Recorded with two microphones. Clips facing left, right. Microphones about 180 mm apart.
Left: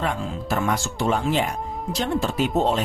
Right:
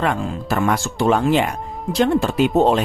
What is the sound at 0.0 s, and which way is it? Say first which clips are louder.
Speech: right 5 dB; 70° right (ahead or behind).